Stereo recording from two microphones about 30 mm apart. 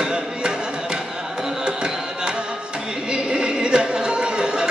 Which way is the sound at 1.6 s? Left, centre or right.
Right.